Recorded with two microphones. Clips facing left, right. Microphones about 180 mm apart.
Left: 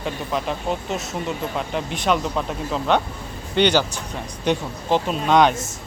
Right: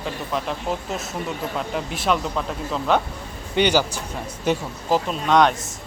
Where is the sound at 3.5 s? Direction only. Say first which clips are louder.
Left 1 dB; 10° right (ahead or behind).